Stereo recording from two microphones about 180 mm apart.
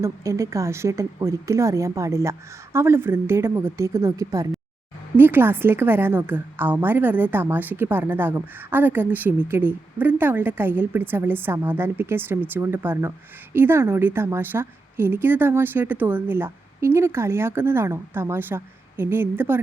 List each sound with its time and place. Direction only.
0.0 s a woman's voice: 15° right (ahead or behind)